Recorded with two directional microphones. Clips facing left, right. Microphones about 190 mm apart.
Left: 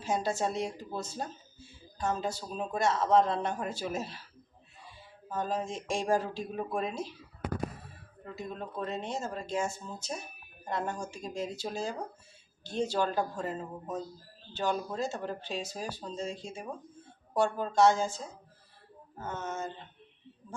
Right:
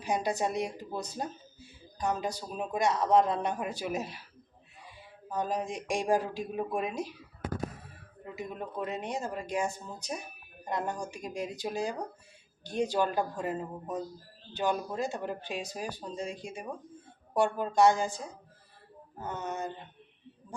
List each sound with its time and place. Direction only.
0.0 s speech: 15° right (ahead or behind)
5.3 s speech: 15° right (ahead or behind)
8.2 s speech: 15° right (ahead or behind)